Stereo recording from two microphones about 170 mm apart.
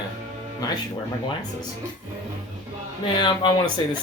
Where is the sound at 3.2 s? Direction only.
25° left (ahead or behind).